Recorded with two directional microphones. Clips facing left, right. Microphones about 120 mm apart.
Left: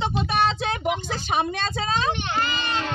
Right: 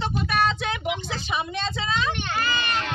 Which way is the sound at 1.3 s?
45° left (ahead or behind).